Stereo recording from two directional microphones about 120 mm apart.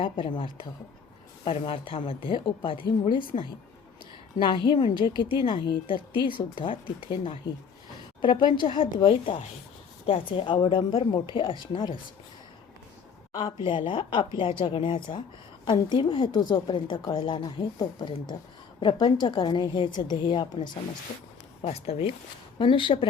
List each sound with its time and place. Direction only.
0.0 s a woman's voice: 45° left (ahead or behind)
13.3 s a woman's voice: 45° left (ahead or behind)
21.6 s speech: 60° left (ahead or behind)
22.5 s a woman's voice: 45° left (ahead or behind)